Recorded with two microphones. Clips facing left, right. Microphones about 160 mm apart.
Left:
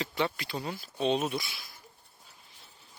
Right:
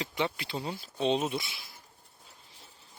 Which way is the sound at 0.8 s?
25° right (ahead or behind).